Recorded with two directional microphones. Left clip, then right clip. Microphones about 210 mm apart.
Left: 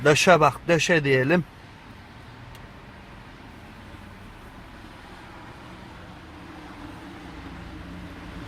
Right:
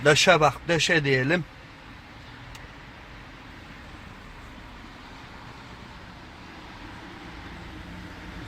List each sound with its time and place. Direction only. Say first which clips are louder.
0.0 s speech: left 1 dB; 20° left (ahead or behind)